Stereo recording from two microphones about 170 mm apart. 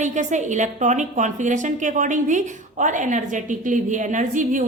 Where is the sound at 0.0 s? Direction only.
45° right (ahead or behind).